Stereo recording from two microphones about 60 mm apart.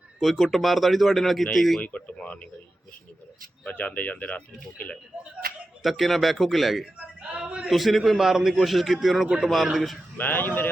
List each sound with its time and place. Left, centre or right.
0.2 s a man's voice: centre
1.8 s speech: left
3.6 s speech: left
5.8 s a man's voice: centre
7.2 s a sound: centre
7.7 s a man's voice: centre
10.2 s speech: left